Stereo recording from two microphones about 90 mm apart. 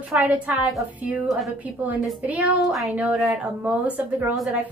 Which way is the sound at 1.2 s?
Centre (ahead or behind).